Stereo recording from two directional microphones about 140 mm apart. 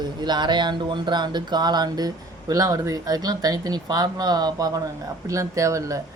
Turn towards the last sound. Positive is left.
turn(degrees=-20)  # may be behind; listen again after turning